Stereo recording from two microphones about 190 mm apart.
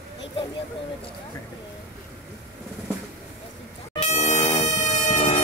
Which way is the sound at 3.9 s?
35° left (ahead or behind).